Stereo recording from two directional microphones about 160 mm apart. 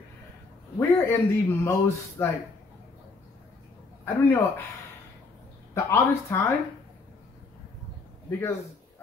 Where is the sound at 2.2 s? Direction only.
15° left (ahead or behind).